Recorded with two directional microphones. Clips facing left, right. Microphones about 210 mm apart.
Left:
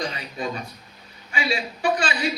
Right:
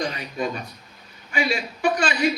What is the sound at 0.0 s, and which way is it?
A man's voice, 40° right (ahead or behind).